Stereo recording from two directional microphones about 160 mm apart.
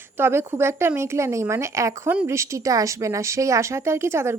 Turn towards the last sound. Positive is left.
turn(degrees=-20)  # may be behind; listen again after turning